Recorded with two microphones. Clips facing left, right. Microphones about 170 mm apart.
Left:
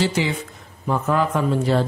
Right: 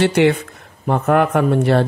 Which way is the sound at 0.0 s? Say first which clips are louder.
Right 8 dB; 65° right (ahead or behind).